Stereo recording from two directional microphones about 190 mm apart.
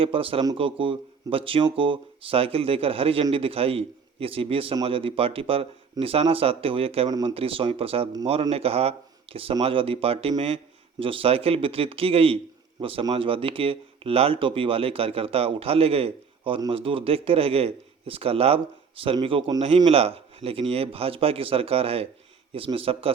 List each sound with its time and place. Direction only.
0.0 s speech: 30° right (ahead or behind)